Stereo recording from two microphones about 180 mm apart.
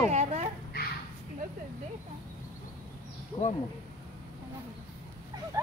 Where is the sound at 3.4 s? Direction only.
35° left (ahead or behind).